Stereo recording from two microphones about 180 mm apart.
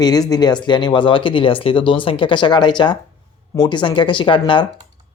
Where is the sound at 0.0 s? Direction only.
20° left (ahead or behind).